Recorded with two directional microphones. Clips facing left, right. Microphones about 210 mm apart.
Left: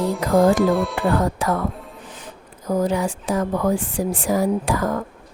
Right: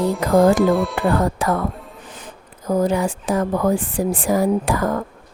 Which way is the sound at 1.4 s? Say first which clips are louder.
Right 2 dB; 55° right (ahead or behind).